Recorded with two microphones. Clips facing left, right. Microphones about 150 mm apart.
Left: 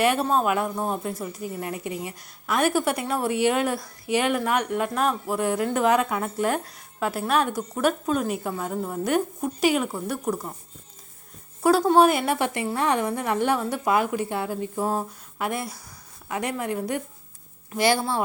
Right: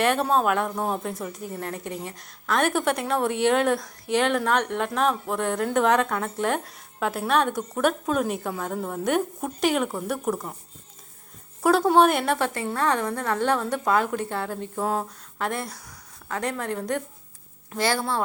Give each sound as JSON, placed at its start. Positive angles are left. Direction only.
{"t": 0.0, "sound": "a woman's voice", "side_deg": 5}
{"t": 11.6, "sound": "a woman's voice", "side_deg": 0}